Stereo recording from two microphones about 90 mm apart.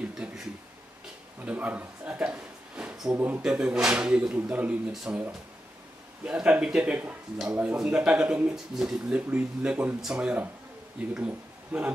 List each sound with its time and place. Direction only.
0.2 s a sound: 10° right (ahead or behind)
1.4 s speech: 15° right (ahead or behind)
3.2 s speech: 20° right (ahead or behind)
4.9 s speech: 5° right (ahead or behind)
6.2 s speech: 10° right (ahead or behind)